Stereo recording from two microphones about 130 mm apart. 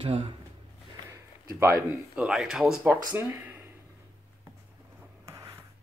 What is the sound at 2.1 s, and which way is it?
Speech, 5° right (ahead or behind).